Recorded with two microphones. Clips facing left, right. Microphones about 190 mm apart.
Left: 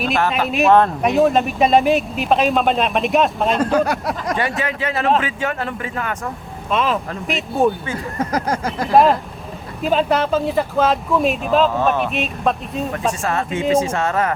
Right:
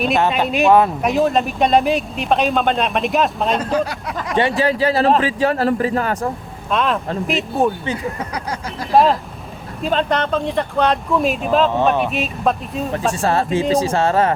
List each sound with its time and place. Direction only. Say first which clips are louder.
0.3 s speech: left 1 dB; centre (ahead or behind)
3.8 s a sound: left 4 dB; 45° left (ahead or behind)
4.4 s speech: right 6 dB; 30° right (ahead or behind)
6.7 s speech: right 1 dB; centre (ahead or behind)
7.9 s a sound: left 3 dB; 45° left (ahead or behind)
8.9 s speech: even; centre (ahead or behind)
13.2 s speech: right 4 dB; 30° right (ahead or behind)